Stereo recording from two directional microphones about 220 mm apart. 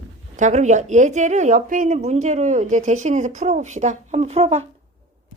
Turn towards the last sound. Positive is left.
turn(degrees=-30)  # may be behind; listen again after turning